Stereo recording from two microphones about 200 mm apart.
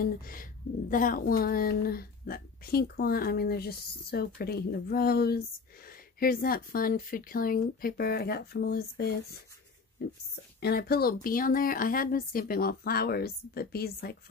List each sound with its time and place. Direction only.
0.0 s speech: 45° left (ahead or behind)